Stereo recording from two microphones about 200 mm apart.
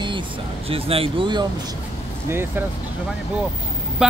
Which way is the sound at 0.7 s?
30° right (ahead or behind).